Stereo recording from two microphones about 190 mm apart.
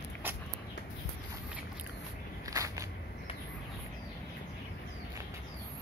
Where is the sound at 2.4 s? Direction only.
15° right (ahead or behind).